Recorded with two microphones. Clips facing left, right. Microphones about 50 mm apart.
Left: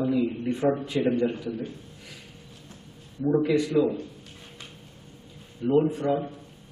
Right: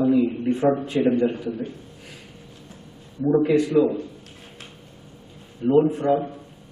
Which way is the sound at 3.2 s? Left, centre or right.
Centre.